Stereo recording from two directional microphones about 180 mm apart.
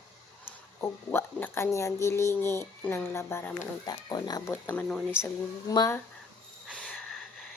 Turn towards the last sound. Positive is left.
turn(degrees=5)  # may be behind; listen again after turning